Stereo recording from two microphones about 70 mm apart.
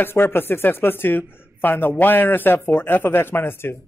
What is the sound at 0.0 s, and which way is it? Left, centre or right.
A man's voice, left.